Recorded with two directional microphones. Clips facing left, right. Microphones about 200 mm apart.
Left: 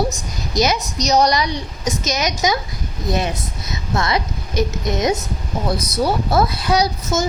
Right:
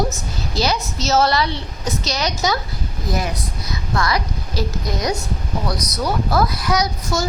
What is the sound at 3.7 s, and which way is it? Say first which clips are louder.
A woman's voice: left 1 dB; 25° left (ahead or behind).